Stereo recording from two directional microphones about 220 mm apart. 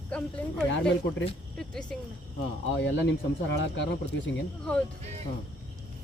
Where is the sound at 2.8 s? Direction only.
55° left (ahead or behind).